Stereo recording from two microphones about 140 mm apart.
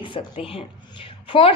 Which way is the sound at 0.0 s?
40° left (ahead or behind).